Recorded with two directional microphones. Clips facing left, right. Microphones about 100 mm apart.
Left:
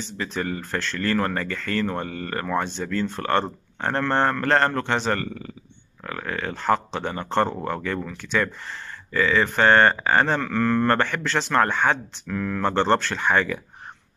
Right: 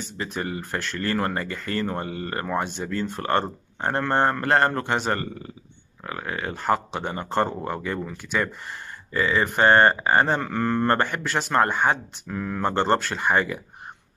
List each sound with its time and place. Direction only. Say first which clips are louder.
0.3 s speech: left 2 dB; 15° right (ahead or behind)
6.0 s speech: left 1 dB; 20° right (ahead or behind)
12.3 s speech: left 2 dB; 25° right (ahead or behind)